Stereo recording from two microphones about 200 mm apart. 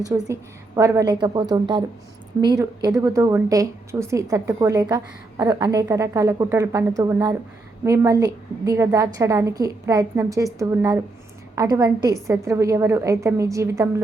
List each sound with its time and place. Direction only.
0.1 s a woman's voice: 10° right (ahead or behind)